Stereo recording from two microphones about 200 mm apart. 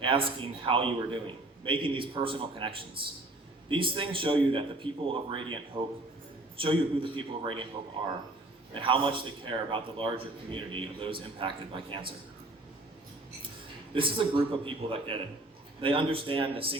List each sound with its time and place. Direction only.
0.0 s a man's voice: 25° right (ahead or behind)
5.7 s a man's voice: 10° right (ahead or behind)
6.6 s a man's voice: 25° right (ahead or behind)
8.7 s a man's voice: 25° right (ahead or behind)
13.9 s a man's voice: 25° right (ahead or behind)